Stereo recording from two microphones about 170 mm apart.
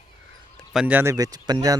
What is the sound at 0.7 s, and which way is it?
Speech, 10° right (ahead or behind).